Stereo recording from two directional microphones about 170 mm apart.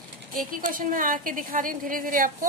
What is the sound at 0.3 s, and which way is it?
A woman's voice, 55° right (ahead or behind).